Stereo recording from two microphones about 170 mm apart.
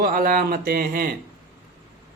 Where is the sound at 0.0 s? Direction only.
60° right (ahead or behind).